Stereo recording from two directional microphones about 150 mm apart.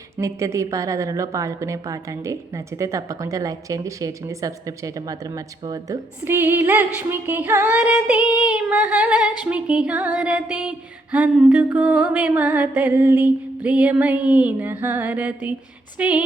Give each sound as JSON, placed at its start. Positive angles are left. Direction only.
{"t": 0.2, "sound": "a woman's voice", "side_deg": -20}
{"t": 9.4, "sound": "music", "side_deg": -10}